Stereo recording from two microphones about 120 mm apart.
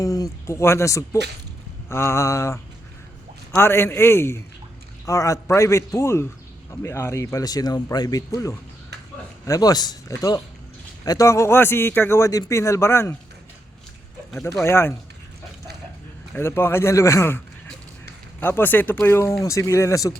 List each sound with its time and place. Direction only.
0.0 s a man's voice: 30° left (ahead or behind)
14.6 s a man's voice: 20° left (ahead or behind)
16.3 s a man's voice: 20° left (ahead or behind)